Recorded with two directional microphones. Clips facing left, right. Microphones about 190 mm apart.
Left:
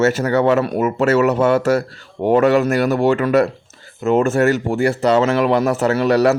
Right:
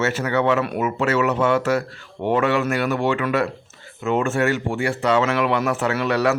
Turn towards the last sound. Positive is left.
turn(degrees=35)  # may be behind; listen again after turning